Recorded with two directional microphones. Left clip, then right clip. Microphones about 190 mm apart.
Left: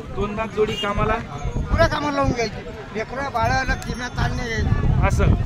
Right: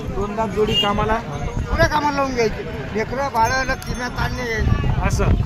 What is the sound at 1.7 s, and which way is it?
Speech, 60° left (ahead or behind).